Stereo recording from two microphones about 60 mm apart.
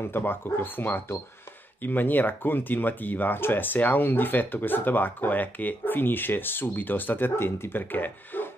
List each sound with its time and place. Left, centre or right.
0.0 s speech: left